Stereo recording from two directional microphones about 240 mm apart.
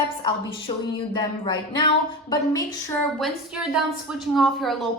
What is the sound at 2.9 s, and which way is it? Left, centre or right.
A woman's voice, centre.